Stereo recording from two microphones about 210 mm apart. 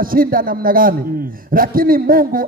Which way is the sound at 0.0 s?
45° right (ahead or behind).